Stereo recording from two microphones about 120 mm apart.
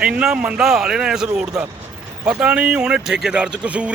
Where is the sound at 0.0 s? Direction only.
5° right (ahead or behind).